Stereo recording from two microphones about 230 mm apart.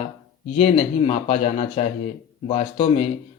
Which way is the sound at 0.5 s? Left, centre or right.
Left.